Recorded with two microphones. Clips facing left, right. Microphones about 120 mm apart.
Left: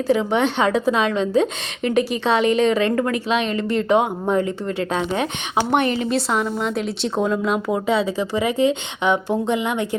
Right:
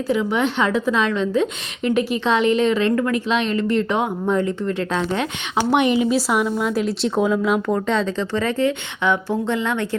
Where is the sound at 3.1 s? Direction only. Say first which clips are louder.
Right 1 dB; 15° left (ahead or behind).